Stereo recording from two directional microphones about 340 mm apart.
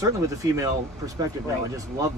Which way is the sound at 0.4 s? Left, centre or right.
Centre.